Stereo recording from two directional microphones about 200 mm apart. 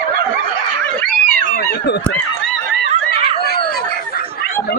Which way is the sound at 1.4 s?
55° left (ahead or behind).